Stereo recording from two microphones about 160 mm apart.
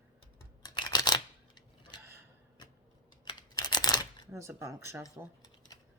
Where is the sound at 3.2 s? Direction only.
25° left (ahead or behind).